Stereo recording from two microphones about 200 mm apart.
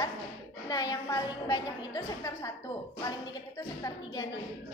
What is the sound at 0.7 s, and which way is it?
Speech, 20° left (ahead or behind).